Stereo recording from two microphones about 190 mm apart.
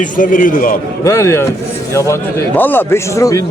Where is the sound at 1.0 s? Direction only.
15° left (ahead or behind).